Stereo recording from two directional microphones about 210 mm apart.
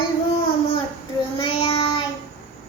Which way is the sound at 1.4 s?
25° left (ahead or behind).